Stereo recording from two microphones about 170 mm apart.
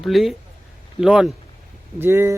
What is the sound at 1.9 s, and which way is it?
Speech, 15° right (ahead or behind).